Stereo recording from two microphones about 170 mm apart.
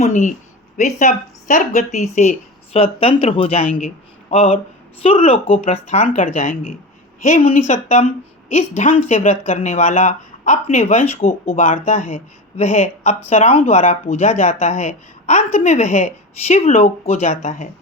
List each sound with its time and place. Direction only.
0.0 s a woman's voice: 45° left (ahead or behind)